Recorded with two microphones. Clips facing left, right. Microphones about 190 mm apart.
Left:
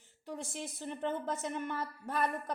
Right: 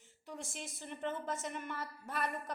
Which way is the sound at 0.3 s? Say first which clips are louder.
Left 5 dB; 60° left (ahead or behind).